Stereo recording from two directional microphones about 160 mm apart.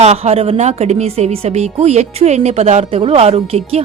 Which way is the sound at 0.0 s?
45° right (ahead or behind).